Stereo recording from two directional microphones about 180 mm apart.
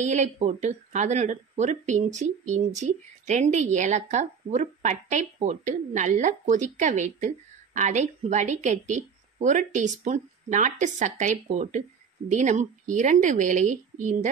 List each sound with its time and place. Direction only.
0.0 s a woman's voice: 40° right (ahead or behind)